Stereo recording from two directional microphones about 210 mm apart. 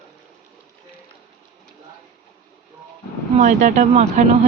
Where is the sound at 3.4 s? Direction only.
35° right (ahead or behind).